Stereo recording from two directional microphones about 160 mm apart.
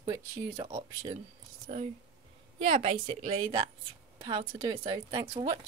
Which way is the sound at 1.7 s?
45° right (ahead or behind).